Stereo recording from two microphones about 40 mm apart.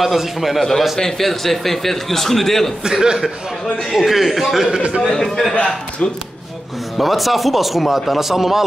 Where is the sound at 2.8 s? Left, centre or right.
Centre.